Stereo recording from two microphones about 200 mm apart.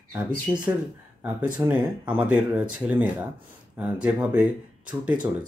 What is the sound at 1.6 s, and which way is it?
Speech, 15° right (ahead or behind).